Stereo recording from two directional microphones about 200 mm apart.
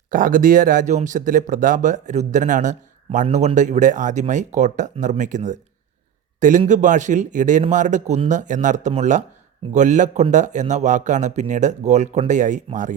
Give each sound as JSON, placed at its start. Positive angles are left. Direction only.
{"t": 0.1, "sound": "speech", "side_deg": -45}